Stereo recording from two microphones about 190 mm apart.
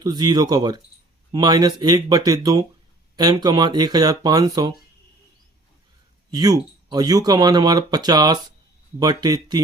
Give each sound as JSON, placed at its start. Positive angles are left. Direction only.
{"t": 0.0, "sound": "speech", "side_deg": -20}
{"t": 6.3, "sound": "speech", "side_deg": -20}